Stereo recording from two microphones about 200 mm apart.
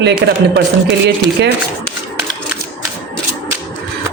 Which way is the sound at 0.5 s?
55° right (ahead or behind).